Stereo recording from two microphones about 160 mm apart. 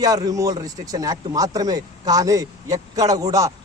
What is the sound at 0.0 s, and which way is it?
Speech, 25° right (ahead or behind).